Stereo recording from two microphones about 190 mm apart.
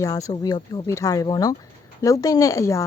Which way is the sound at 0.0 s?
15° left (ahead or behind).